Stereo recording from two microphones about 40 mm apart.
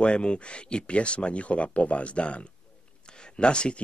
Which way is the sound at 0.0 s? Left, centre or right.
Left.